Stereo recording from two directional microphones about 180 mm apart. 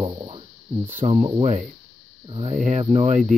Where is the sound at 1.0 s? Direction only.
35° right (ahead or behind).